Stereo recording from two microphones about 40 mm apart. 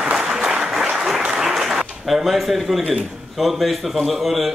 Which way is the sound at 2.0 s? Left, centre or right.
Centre.